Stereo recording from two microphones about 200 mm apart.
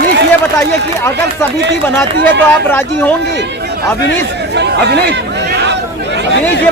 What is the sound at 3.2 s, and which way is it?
Speech, 55° right (ahead or behind).